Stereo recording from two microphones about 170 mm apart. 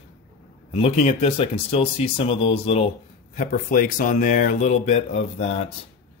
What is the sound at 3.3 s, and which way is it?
Speech, 50° left (ahead or behind).